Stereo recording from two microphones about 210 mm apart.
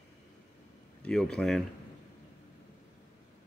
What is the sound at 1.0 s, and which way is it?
Speech, 5° left (ahead or behind).